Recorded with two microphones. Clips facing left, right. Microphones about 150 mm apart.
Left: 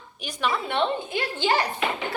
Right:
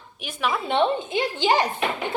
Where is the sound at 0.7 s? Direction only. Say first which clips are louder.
Right 4 dB; 20° right (ahead or behind).